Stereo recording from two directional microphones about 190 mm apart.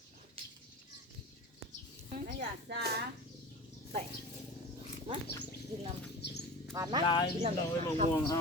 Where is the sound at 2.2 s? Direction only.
50° right (ahead or behind).